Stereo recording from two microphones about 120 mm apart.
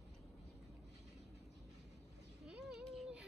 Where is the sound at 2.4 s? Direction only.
10° right (ahead or behind).